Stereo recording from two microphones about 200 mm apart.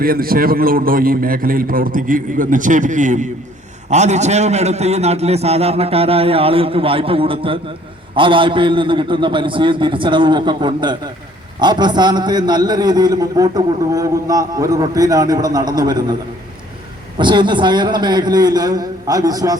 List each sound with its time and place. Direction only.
0.0 s a man's voice: 45° right (ahead or behind); by 16.1 s 20° right (ahead or behind)
17.2 s a man's voice: 25° right (ahead or behind)